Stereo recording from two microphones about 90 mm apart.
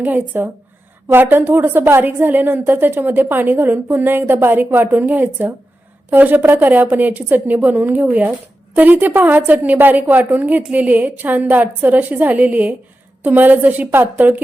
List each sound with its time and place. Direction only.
0.0 s a woman's voice: 20° right (ahead or behind)